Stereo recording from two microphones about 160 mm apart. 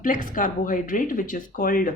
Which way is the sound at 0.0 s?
60° left (ahead or behind).